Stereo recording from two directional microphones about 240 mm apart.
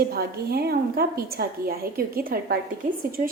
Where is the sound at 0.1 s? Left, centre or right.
Right.